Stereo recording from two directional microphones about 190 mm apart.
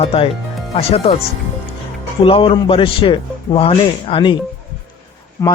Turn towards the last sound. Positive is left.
turn(degrees=15)  # may be behind; listen again after turning